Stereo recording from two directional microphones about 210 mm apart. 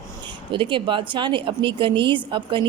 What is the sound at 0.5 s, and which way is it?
Speech, 25° right (ahead or behind).